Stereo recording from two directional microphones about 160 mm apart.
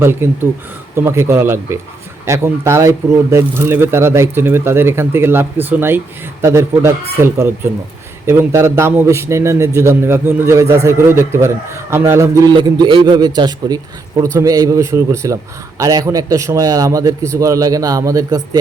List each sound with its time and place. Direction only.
0.0 s a man's voice: 15° right (ahead or behind)